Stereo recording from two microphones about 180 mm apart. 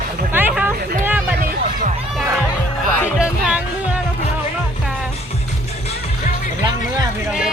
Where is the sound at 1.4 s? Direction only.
55° right (ahead or behind).